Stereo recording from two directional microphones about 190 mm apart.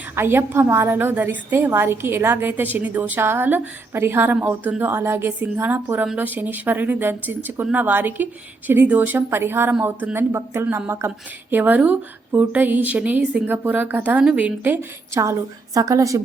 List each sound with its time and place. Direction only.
0.2 s a woman's voice: 10° right (ahead or behind)